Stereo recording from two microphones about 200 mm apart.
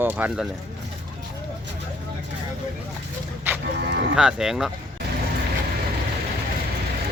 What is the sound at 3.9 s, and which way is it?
Livestock, 60° right (ahead or behind).